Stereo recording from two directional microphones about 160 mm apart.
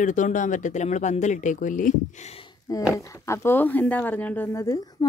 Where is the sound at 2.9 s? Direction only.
20° left (ahead or behind).